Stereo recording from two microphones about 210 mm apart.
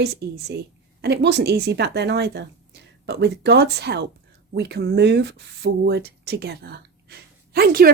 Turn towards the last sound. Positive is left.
turn(degrees=-45)  # may be behind; listen again after turning